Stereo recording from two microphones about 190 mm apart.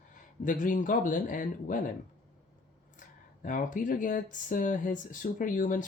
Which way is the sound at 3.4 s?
45° left (ahead or behind).